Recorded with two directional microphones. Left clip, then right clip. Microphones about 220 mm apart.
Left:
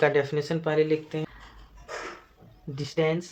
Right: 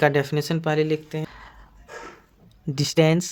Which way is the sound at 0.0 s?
45° right (ahead or behind).